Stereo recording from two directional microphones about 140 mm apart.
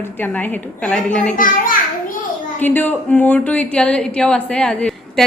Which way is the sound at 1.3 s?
80° left.